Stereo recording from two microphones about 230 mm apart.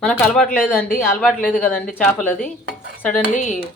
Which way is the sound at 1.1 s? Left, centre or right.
Centre.